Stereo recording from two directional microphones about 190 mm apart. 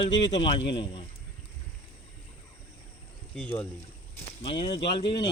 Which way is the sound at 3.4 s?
10° left (ahead or behind).